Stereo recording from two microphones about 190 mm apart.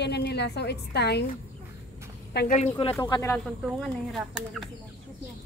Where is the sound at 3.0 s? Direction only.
15° left (ahead or behind).